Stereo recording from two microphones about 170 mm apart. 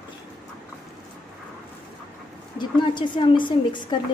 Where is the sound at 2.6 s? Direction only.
30° left (ahead or behind).